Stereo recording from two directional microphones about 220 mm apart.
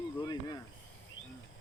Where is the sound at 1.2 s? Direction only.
60° left (ahead or behind).